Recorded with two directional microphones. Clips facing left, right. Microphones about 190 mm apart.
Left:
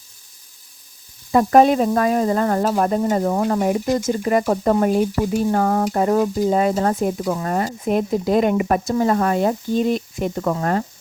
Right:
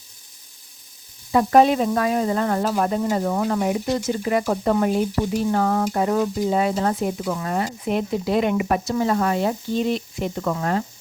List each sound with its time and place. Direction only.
1.3 s sizzle: 45° left (ahead or behind)